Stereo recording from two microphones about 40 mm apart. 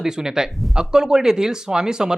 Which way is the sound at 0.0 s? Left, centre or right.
Centre.